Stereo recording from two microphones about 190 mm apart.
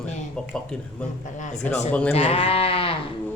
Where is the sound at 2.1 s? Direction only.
35° left (ahead or behind).